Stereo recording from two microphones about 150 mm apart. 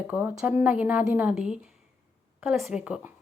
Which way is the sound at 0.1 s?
10° right (ahead or behind).